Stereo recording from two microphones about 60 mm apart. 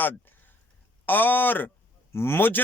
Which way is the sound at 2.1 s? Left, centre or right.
Left.